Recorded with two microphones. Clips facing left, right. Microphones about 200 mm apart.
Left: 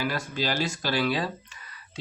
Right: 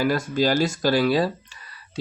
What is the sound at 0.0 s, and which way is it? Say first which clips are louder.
Speech: right 8 dB; 45° right (ahead or behind).